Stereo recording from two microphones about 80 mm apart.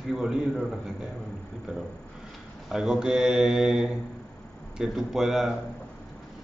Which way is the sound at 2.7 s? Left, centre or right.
Centre.